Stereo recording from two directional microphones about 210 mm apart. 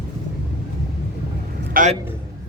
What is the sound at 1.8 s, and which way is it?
Speech, 40° right (ahead or behind).